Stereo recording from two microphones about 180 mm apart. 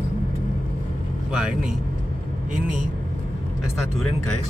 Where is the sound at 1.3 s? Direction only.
5° right (ahead or behind).